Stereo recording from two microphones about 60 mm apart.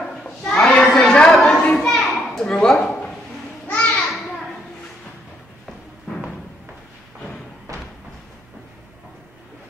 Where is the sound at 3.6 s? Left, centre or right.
Left.